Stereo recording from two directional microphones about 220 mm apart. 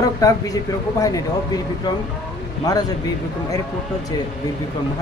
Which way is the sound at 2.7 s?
15° left (ahead or behind).